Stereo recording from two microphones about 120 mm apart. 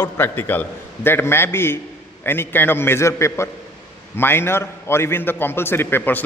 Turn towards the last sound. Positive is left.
turn(degrees=15)  # may be behind; listen again after turning